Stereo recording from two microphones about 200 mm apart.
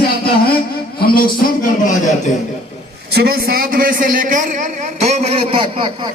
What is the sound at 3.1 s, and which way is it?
A man's voice, 50° right (ahead or behind).